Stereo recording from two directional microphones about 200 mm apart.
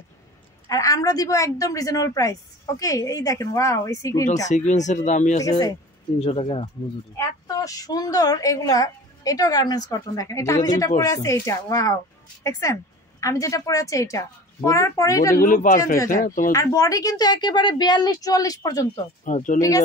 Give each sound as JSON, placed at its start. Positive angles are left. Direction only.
{"t": 0.7, "sound": "a woman's voice", "side_deg": 15}
{"t": 4.5, "sound": "speech", "side_deg": 35}
{"t": 5.4, "sound": "a woman's voice", "side_deg": 20}
{"t": 6.1, "sound": "a woman's voice", "side_deg": 30}
{"t": 7.2, "sound": "a woman's voice", "side_deg": 15}
{"t": 15.4, "sound": "speech", "side_deg": 40}
{"t": 16.5, "sound": "a woman's voice", "side_deg": 15}
{"t": 19.2, "sound": "speech", "side_deg": 40}